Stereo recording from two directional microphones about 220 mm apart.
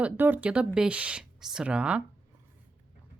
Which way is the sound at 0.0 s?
5° right (ahead or behind).